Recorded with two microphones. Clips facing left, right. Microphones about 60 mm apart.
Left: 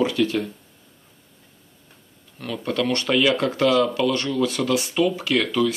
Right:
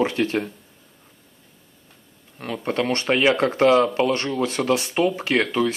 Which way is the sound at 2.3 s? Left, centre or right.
Right.